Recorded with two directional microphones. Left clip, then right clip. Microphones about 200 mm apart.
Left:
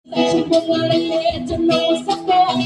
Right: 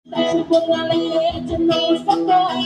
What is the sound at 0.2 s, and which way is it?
Music, 35° left (ahead or behind).